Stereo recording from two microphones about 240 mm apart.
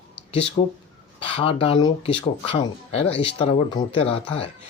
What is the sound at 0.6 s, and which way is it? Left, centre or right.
Speech, left.